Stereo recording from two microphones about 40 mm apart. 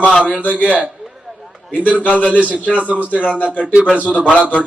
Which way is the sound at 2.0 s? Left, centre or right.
Left.